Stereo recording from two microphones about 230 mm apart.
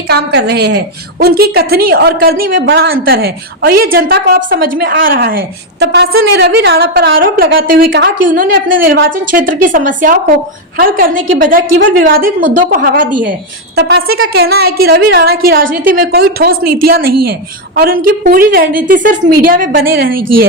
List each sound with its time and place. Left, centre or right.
0.1 s a woman's voice: right
20.1 s speech: right